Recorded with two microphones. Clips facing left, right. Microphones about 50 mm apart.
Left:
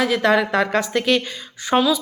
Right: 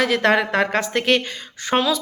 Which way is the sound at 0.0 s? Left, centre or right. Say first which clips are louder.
Even; right.